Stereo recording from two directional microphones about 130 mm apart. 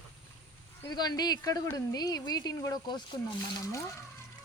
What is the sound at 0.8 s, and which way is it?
A woman's voice, 30° left (ahead or behind).